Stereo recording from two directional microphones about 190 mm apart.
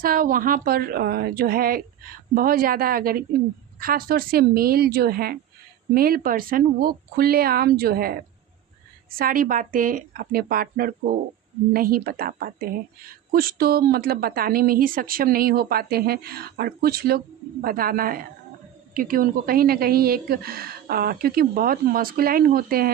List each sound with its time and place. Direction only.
0.0 s a woman's voice: 45° right (ahead or behind)
9.1 s a woman's voice: 50° right (ahead or behind)